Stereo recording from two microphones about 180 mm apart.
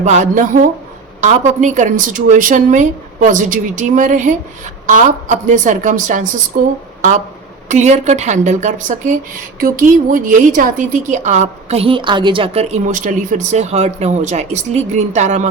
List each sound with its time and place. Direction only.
0.0 s speech: 40° right (ahead or behind)
7.7 s a woman's voice: 40° right (ahead or behind)